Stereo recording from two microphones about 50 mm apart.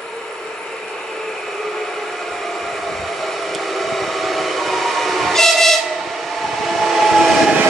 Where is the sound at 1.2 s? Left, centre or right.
Centre.